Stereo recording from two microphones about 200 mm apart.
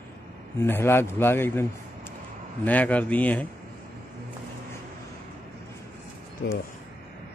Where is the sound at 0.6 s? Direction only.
10° left (ahead or behind).